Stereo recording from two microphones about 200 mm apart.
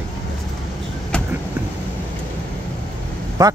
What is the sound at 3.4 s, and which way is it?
Speech, 20° right (ahead or behind).